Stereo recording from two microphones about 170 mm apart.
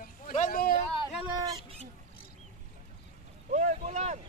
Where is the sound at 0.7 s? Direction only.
20° left (ahead or behind).